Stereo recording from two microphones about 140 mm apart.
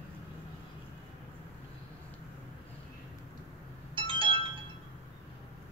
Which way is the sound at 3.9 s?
35° right (ahead or behind).